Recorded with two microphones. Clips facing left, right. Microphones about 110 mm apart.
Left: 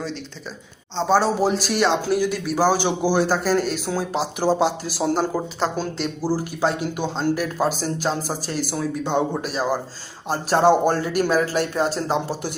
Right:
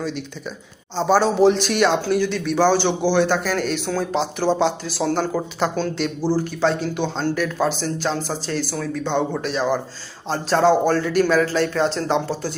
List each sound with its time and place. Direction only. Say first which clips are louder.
0.9 s speech: right 2 dB; centre (ahead or behind); by 9.0 s 20° left (ahead or behind)
9.4 s speech: right 2 dB; 5° left (ahead or behind)